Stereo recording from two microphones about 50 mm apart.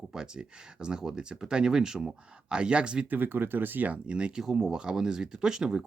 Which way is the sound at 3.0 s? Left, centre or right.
Right.